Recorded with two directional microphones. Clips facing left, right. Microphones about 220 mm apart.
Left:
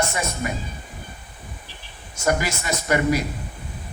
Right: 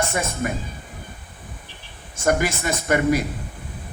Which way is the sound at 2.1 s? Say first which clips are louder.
Right 2 dB; 50° right (ahead or behind).